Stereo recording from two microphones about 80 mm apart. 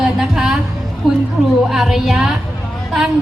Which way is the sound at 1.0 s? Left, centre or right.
Centre.